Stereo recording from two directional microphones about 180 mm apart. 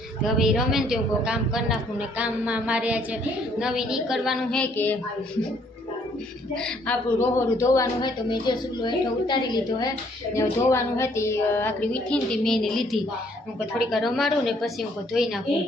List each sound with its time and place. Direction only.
0.2 s a woman's voice: 5° right (ahead or behind)
6.6 s a man's voice: 5° left (ahead or behind)